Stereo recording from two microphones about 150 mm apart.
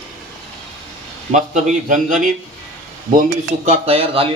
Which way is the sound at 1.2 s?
55° right (ahead or behind).